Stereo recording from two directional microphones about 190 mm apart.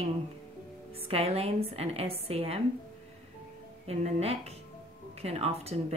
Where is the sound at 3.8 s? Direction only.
35° right (ahead or behind).